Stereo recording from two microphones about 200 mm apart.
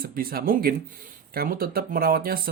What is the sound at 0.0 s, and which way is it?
Speech, 45° right (ahead or behind).